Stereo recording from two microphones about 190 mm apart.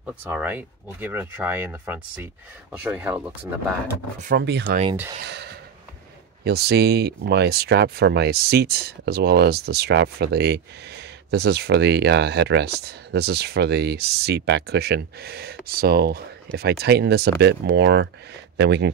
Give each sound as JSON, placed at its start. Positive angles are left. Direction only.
{"t": 0.0, "sound": "speech", "side_deg": -10}
{"t": 4.4, "sound": "speech", "side_deg": -65}
{"t": 5.2, "sound": "a sound", "side_deg": -60}
{"t": 6.4, "sound": "speech", "side_deg": -55}